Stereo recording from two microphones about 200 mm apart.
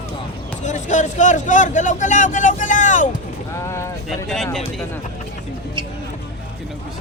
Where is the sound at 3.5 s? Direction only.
15° left (ahead or behind).